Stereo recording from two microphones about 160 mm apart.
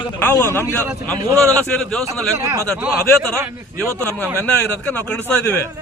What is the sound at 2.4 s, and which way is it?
Speech, 15° right (ahead or behind).